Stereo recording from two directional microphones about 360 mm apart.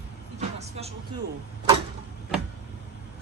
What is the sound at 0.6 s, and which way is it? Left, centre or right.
Music, centre.